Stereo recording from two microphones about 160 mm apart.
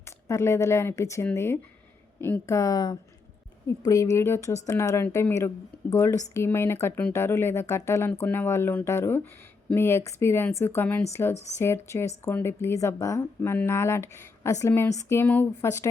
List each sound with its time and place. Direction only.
0.0 s speech: 15° left (ahead or behind)